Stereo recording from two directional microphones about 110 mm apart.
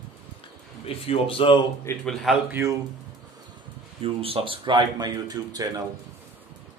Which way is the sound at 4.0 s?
60° right (ahead or behind).